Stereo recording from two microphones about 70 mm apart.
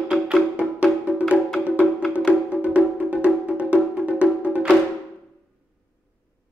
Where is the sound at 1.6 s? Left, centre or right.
Left.